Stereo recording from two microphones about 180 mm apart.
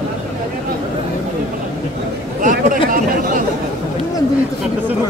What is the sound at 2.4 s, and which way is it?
Chatter, 50° right (ahead or behind).